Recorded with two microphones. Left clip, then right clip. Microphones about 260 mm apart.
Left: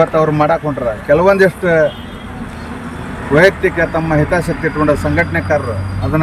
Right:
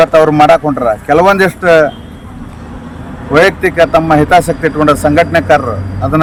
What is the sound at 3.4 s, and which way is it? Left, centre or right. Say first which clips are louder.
Speech: right 3 dB; centre.